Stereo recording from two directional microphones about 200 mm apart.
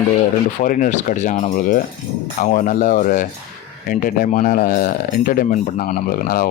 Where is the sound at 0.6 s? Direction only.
40° left (ahead or behind).